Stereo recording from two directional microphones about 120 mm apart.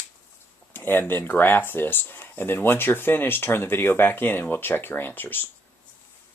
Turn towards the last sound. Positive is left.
turn(degrees=15)  # may be behind; listen again after turning